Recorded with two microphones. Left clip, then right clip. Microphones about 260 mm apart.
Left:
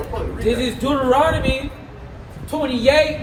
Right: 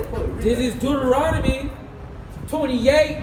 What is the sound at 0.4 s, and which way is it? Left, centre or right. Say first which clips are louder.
Speech: left 2 dB; centre.